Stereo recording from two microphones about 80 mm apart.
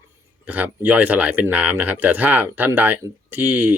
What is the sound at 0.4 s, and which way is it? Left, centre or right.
Speech, right.